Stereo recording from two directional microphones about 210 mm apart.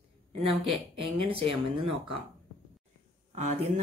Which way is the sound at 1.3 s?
25° right (ahead or behind).